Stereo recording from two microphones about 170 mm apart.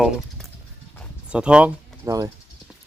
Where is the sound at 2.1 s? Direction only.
20° right (ahead or behind).